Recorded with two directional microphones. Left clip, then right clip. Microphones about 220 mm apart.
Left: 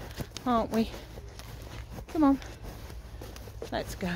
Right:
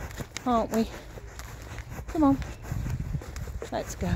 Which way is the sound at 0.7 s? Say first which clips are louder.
Right 2 dB; 20° right (ahead or behind).